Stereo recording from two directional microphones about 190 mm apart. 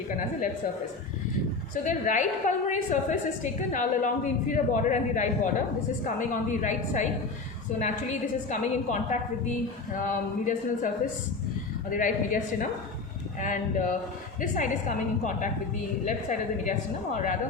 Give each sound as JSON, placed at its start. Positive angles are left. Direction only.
{"t": 0.2, "sound": "speech", "side_deg": 45}
{"t": 1.7, "sound": "a woman's voice", "side_deg": 45}